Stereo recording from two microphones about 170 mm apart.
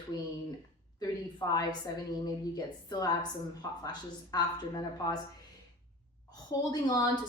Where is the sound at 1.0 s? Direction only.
20° left (ahead or behind).